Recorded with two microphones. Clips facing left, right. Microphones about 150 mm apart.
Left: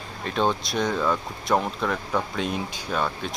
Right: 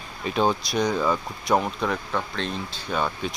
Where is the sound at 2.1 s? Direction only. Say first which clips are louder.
Left 2 dB; 10° left (ahead or behind).